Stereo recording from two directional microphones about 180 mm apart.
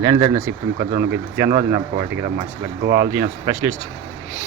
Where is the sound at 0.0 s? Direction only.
20° right (ahead or behind).